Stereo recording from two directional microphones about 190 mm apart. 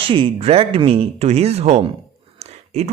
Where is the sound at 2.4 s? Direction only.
35° right (ahead or behind).